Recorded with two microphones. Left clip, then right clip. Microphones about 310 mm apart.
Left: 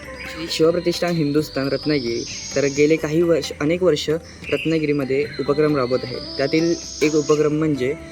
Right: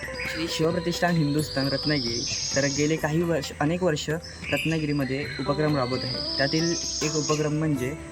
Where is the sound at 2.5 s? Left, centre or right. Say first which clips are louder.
Left 9 dB; centre.